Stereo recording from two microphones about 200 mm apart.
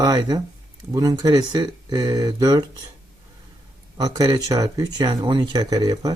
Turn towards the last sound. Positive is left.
turn(degrees=-20)  # may be behind; listen again after turning